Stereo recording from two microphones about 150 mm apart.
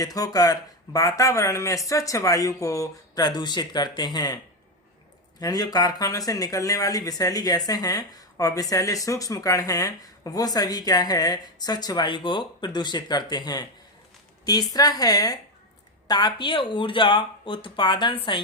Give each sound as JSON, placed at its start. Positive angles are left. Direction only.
{"t": 0.0, "sound": "speech", "side_deg": 25}
{"t": 5.4, "sound": "speech", "side_deg": 25}